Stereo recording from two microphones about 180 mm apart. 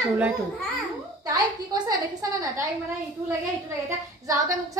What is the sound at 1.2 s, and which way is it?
Speech, 20° right (ahead or behind).